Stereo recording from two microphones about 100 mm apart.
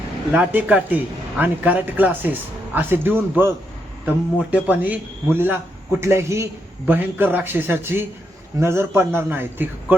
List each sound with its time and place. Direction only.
0.3 s a man's voice: 15° right (ahead or behind)